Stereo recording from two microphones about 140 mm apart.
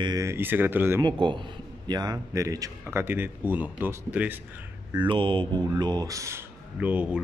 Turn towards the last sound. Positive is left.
turn(degrees=-10)  # may be behind; listen again after turning